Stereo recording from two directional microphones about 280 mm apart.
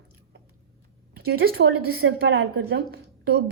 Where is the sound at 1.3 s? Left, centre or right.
Right.